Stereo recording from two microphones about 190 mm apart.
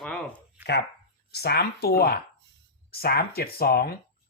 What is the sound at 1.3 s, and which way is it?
Speech, 60° left (ahead or behind).